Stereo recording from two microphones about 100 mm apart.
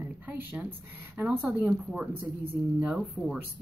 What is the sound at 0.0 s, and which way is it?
Speech, 20° right (ahead or behind).